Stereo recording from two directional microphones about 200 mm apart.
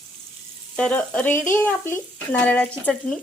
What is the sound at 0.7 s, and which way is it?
Speech, 5° left (ahead or behind).